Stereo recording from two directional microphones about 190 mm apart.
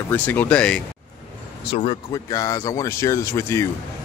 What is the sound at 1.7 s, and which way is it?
Speech, 30° left (ahead or behind).